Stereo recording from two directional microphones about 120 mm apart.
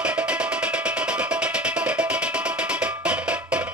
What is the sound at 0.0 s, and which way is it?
Music, 10° right (ahead or behind).